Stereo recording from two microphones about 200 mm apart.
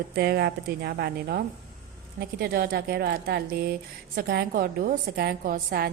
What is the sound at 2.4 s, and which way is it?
A woman's voice, 50° right (ahead or behind).